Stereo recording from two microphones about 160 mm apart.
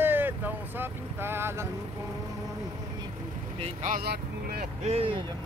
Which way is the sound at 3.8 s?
55° right (ahead or behind).